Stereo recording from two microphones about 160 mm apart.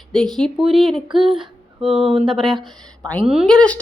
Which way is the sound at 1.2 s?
30° right (ahead or behind).